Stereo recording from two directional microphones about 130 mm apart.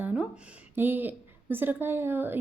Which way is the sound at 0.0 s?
10° right (ahead or behind).